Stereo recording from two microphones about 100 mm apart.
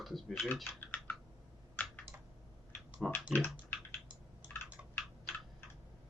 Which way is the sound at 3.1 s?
20° left (ahead or behind).